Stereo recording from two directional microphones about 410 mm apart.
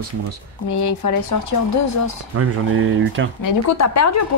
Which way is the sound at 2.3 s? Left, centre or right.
Right.